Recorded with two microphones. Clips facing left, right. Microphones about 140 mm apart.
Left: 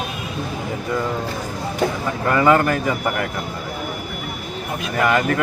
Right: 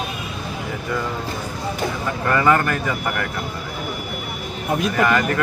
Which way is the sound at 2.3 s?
15° left (ahead or behind).